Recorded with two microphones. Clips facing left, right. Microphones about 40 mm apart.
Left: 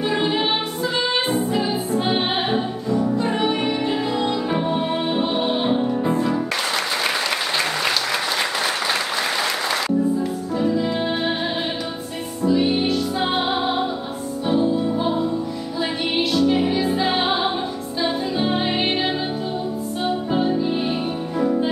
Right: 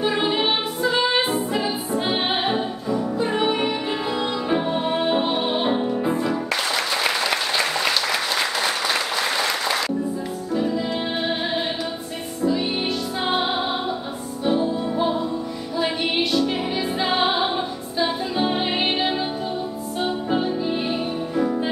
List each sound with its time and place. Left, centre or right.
0.0 s music: centre
10.5 s music: centre
12.4 s music: centre
14.4 s music: centre
20.2 s music: centre